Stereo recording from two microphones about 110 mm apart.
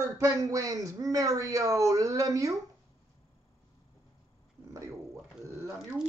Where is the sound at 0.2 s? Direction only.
30° right (ahead or behind).